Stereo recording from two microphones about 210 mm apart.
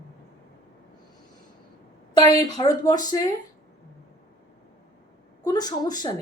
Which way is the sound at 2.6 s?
20° left (ahead or behind).